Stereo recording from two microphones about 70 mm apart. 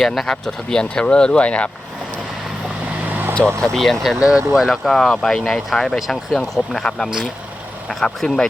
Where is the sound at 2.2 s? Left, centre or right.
Centre; by 3.3 s right.